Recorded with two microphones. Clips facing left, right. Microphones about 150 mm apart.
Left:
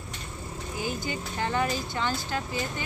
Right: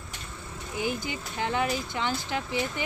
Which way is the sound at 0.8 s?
15° right (ahead or behind).